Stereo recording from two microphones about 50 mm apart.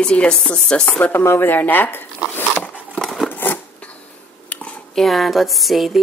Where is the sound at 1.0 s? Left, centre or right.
Left.